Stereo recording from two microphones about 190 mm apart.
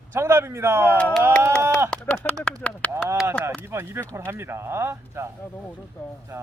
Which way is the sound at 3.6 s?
10° right (ahead or behind).